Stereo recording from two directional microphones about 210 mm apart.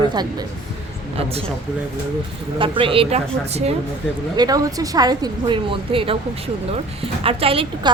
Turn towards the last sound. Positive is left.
turn(degrees=-25)  # may be behind; listen again after turning